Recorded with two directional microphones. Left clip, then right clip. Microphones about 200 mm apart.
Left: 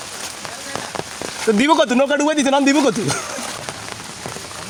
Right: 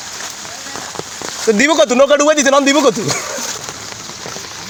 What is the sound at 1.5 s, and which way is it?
Speech, 5° left (ahead or behind).